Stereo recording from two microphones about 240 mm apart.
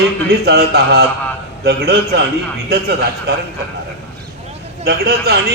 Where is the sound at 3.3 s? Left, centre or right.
Right.